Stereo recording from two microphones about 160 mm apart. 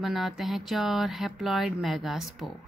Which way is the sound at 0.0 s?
Centre (ahead or behind).